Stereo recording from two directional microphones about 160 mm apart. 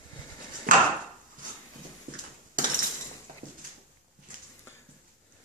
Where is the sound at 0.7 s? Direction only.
60° right (ahead or behind).